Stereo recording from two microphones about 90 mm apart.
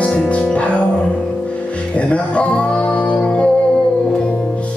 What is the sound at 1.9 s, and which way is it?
Music, 15° left (ahead or behind).